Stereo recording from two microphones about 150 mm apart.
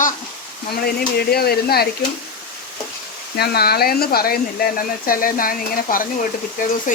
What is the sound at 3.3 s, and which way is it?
Speech, 90° left.